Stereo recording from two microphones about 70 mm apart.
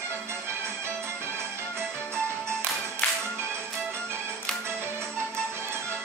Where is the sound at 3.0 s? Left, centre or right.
Left.